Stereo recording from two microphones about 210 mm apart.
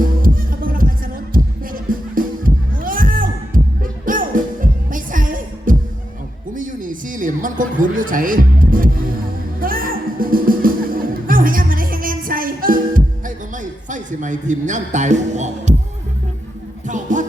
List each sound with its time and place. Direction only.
0.0 s music: 40° right (ahead or behind)
6.5 s a sound: 40° right (ahead or behind)
9.6 s music: 45° right (ahead or behind)
16.8 s music: 35° right (ahead or behind)